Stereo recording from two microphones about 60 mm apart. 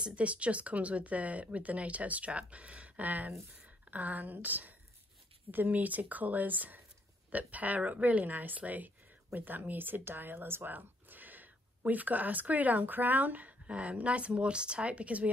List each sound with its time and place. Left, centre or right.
0.0 s a woman's voice: right